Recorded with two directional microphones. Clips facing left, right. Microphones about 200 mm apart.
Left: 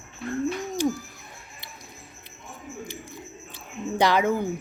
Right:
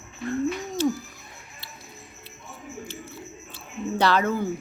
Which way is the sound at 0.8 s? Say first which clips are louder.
Right 1 dB; 15° left (ahead or behind).